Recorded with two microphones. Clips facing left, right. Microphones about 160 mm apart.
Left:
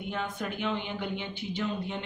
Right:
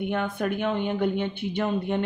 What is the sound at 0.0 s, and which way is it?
Speech, 60° right (ahead or behind).